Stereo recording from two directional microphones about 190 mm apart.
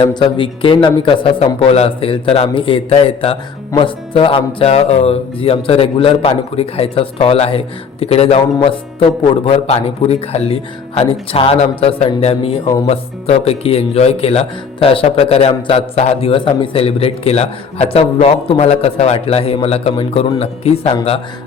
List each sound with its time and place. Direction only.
0.0 s a man's voice: 25° left (ahead or behind)
3.7 s music: 25° left (ahead or behind)